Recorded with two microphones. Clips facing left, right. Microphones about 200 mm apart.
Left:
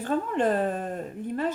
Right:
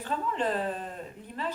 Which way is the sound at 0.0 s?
50° left (ahead or behind).